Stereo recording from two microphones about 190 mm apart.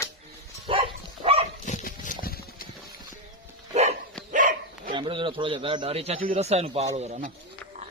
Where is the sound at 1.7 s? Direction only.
40° left (ahead or behind).